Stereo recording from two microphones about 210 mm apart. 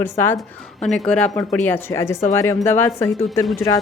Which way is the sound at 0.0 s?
10° left (ahead or behind).